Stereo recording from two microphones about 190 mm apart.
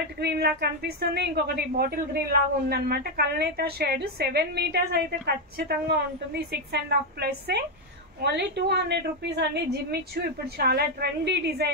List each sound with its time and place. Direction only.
0.2 s a woman's voice: 60° right (ahead or behind)